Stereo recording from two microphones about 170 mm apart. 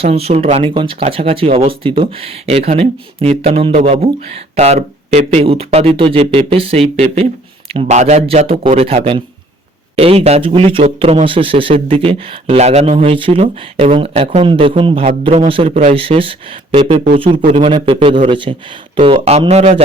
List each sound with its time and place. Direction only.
0.0 s speech: 35° right (ahead or behind)